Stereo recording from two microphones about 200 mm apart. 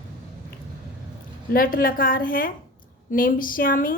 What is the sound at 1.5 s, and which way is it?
A woman's voice, 45° left (ahead or behind).